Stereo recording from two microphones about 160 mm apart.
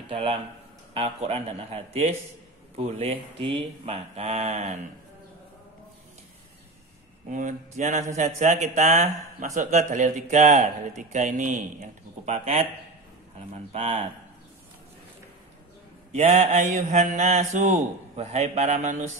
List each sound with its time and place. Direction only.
0.1 s speech: 40° right (ahead or behind)
7.2 s mantra: 50° right (ahead or behind)
12.3 s mantra: 40° right (ahead or behind)
13.5 s speech: 40° right (ahead or behind)
16.1 s mantra: 40° right (ahead or behind)